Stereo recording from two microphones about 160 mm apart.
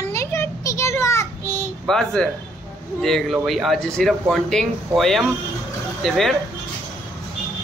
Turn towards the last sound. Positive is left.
turn(degrees=0)  # may be behind; listen again after turning